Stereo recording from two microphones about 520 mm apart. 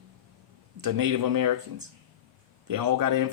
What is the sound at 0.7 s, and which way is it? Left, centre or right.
Speech, right.